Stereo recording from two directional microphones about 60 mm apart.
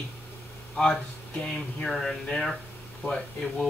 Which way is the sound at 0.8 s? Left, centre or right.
Left.